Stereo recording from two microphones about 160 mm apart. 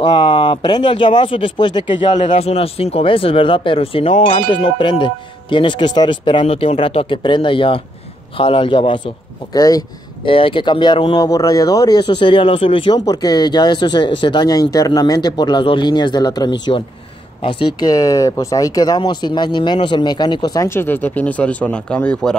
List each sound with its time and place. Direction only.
0.0 s speech: 35° left (ahead or behind)
2.1 s speech: 40° left (ahead or behind); by 22.3 s 5° left (ahead or behind)